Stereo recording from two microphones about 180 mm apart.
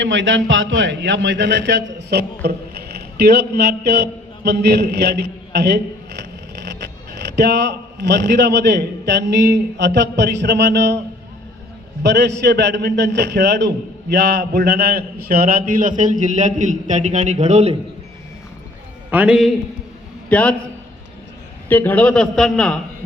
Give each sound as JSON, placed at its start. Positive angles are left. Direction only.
{"t": 0.0, "sound": "a man's voice", "side_deg": -90}
{"t": 12.0, "sound": "a man's voice", "side_deg": -70}
{"t": 19.1, "sound": "a man's voice", "side_deg": -5}
{"t": 20.3, "sound": "a man's voice", "side_deg": 5}
{"t": 21.7, "sound": "a man's voice", "side_deg": 10}